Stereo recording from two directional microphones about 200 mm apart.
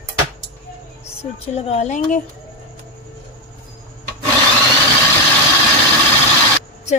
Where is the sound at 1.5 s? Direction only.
30° left (ahead or behind).